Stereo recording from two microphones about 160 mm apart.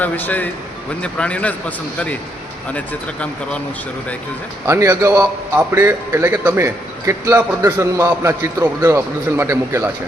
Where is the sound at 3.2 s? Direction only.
5° left (ahead or behind).